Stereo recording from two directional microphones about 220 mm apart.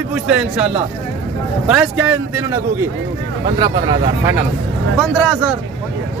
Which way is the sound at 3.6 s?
20° right (ahead or behind).